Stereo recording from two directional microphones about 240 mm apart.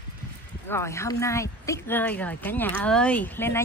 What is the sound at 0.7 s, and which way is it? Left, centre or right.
Speech, centre.